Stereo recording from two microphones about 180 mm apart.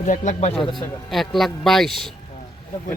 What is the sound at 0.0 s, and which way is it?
Speech, 40° left (ahead or behind).